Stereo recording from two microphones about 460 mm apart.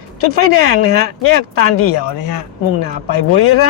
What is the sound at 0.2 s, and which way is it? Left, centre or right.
Speech, left.